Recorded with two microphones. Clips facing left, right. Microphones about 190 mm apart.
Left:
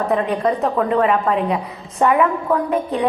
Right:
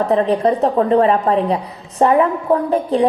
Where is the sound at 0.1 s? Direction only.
30° right (ahead or behind).